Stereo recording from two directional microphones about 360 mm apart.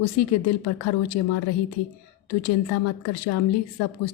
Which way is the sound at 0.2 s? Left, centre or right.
Left.